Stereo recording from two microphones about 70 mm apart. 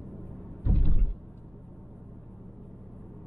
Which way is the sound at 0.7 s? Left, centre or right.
Centre.